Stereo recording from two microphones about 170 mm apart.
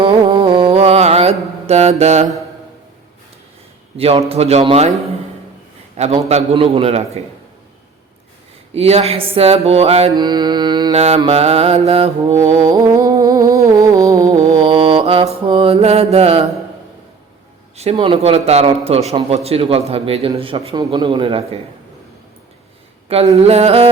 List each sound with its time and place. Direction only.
0.0 s mantra: 30° right (ahead or behind)
3.9 s a man's voice: 35° right (ahead or behind)
6.0 s a man's voice: 40° right (ahead or behind)
8.7 s a man's voice: 35° right (ahead or behind)
10.2 s mantra: 25° right (ahead or behind)
10.9 s a man's voice: 40° right (ahead or behind)
12.6 s music: 20° right (ahead or behind)
14.4 s mantra: 30° right (ahead or behind)
17.7 s a man's voice: 35° right (ahead or behind)
23.0 s a man's voice: 35° right (ahead or behind)